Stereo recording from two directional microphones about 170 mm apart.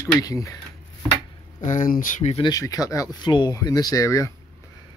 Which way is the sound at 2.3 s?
25° left (ahead or behind).